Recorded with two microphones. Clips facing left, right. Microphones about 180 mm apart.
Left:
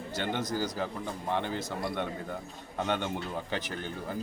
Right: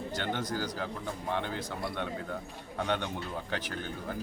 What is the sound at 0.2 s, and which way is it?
Speech, 10° left (ahead or behind).